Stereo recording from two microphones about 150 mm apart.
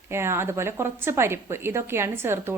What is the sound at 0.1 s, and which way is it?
A woman's voice, 15° right (ahead or behind).